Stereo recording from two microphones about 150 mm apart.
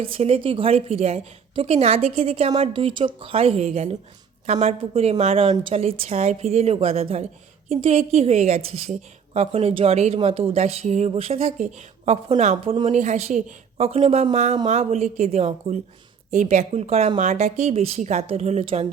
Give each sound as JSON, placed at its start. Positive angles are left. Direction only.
{"t": 0.0, "sound": "a woman's voice", "side_deg": -40}